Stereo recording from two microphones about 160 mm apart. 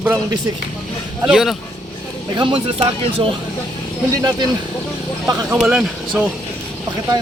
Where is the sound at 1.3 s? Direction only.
Centre (ahead or behind).